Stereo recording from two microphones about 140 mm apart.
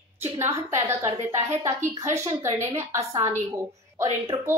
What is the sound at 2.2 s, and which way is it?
Speech, 20° right (ahead or behind).